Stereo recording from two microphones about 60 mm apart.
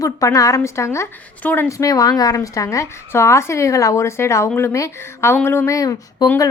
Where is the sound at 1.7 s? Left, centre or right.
Left.